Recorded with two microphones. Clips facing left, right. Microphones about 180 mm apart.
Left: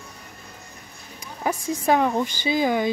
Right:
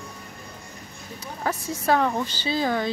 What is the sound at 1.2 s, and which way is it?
Speech, 15° left (ahead or behind).